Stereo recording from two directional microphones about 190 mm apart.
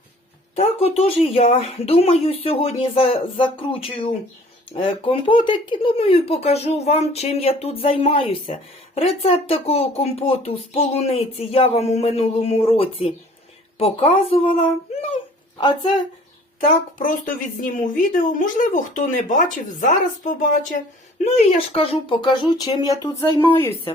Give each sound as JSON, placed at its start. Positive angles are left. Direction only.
{"t": 0.5, "sound": "speech", "side_deg": 30}
{"t": 16.6, "sound": "a woman's voice", "side_deg": 45}